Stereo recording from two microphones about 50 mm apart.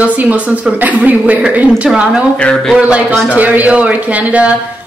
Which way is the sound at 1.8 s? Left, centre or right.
Centre.